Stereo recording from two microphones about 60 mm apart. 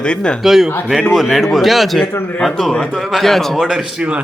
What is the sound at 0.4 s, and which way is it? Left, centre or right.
Speech, centre.